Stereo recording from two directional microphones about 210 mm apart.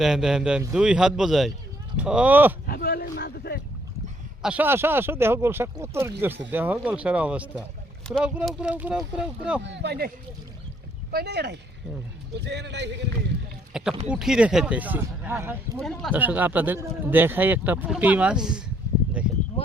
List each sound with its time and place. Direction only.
0.0 s speech: centre (ahead or behind)
2.6 s a sound: 45° left (ahead or behind)
4.4 s speech: 10° right (ahead or behind)
9.6 s a man's voice: 55° right (ahead or behind)
11.1 s a man's voice: 50° right (ahead or behind)
13.7 s a sound: 5° right (ahead or behind)
14.1 s speech: 5° right (ahead or behind)
15.8 s speech: 5° left (ahead or behind)
16.1 s speech: 10° right (ahead or behind)